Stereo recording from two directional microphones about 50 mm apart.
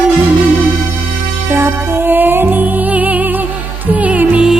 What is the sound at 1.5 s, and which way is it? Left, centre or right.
Music, right.